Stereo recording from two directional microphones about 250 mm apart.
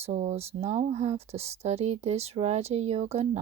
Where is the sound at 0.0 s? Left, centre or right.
Right.